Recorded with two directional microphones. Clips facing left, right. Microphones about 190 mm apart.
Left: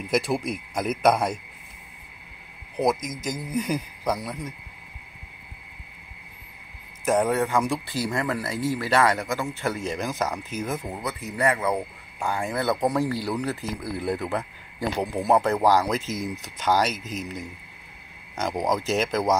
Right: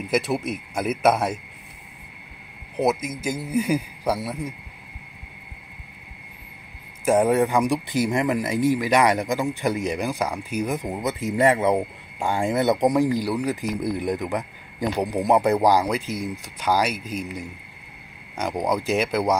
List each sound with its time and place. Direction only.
0.1 s speech: 5° right (ahead or behind)
2.8 s speech: 5° right (ahead or behind)
7.1 s speech: 10° right (ahead or behind)